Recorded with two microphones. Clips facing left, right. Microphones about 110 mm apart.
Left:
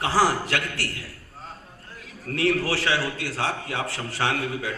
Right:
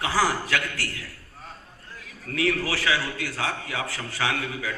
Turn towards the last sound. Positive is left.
turn(degrees=30)  # may be behind; listen again after turning